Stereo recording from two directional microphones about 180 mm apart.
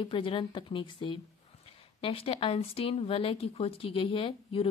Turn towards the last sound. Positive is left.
turn(degrees=30)  # may be behind; listen again after turning